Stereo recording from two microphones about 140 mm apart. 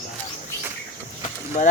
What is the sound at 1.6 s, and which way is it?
Speech, 60° left (ahead or behind).